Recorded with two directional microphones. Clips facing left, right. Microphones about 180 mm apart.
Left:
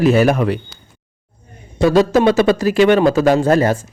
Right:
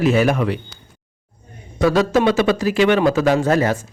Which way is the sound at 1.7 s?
30° left (ahead or behind).